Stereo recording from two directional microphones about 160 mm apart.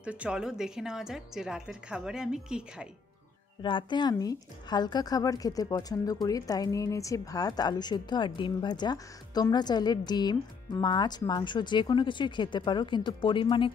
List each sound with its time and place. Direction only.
0.0 s a woman's voice: 5° right (ahead or behind)
3.6 s a woman's voice: 30° left (ahead or behind)